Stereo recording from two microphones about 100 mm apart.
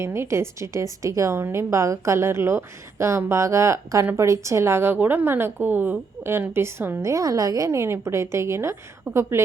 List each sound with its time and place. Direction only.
0.0 s a woman's voice: 25° right (ahead or behind)